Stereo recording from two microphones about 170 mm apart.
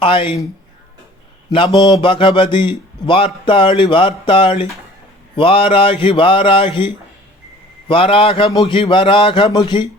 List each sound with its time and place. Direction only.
0.0 s speech: 30° left (ahead or behind)
1.5 s a man's voice: 25° left (ahead or behind)